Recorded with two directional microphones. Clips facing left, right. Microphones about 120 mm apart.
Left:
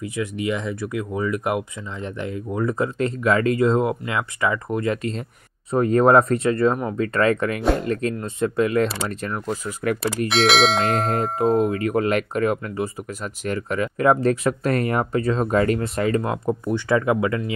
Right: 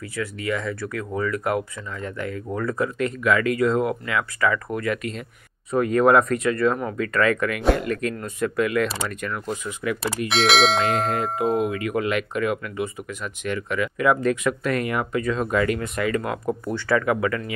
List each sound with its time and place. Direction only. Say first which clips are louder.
0.1 s speech: left 1 dB; 20° left (ahead or behind)
3.0 s speech: left 2 dB; 30° left (ahead or behind)
10.0 s bell: left 2 dB; centre (ahead or behind)
11.4 s speech: left 4 dB; 35° left (ahead or behind)
16.4 s speech: left 2 dB; 20° left (ahead or behind)